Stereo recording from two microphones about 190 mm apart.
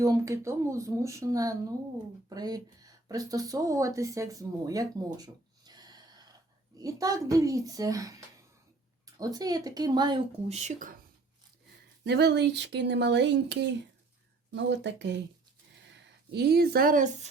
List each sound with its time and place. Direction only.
0.0 s speech: 15° right (ahead or behind)
9.1 s speech: 20° right (ahead or behind)
10.5 s speech: 40° right (ahead or behind)
12.0 s speech: 60° right (ahead or behind)
16.3 s speech: 60° right (ahead or behind); by 17.2 s 45° right (ahead or behind)